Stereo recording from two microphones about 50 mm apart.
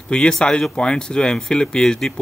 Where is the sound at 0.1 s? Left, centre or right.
Centre.